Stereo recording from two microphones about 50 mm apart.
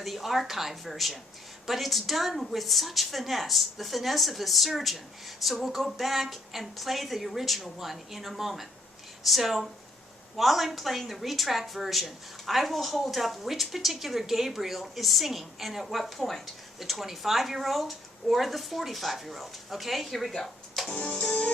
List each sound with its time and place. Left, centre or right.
0.0 s a woman's voice: centre
21.1 s music: centre